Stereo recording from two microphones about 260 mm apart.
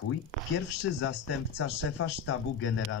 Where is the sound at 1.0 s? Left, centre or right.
Left.